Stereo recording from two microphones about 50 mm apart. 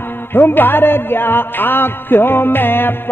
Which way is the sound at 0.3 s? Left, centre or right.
Left.